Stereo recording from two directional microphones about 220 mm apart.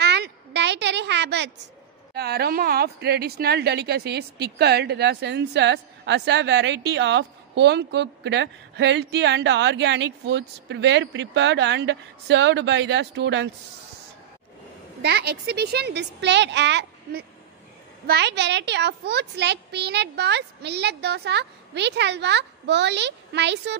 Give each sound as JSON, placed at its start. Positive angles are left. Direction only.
{"t": 0.0, "sound": "a sound", "side_deg": -50}
{"t": 2.1, "sound": "a woman's voice", "side_deg": -45}
{"t": 15.0, "sound": "a woman's voice", "side_deg": -50}